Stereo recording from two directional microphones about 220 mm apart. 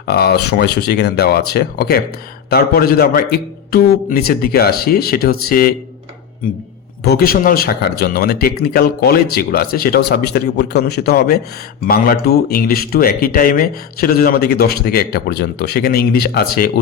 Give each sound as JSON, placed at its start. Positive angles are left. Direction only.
{"t": 0.1, "sound": "speech", "side_deg": 45}
{"t": 7.0, "sound": "speech", "side_deg": 45}